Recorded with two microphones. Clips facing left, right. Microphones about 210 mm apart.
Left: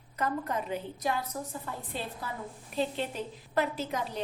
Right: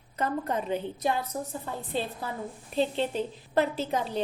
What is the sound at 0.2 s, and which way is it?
A woman's voice, 30° right (ahead or behind).